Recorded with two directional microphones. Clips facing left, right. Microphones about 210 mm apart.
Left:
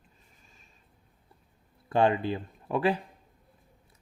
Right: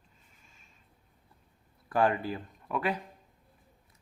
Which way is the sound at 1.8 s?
25° left (ahead or behind).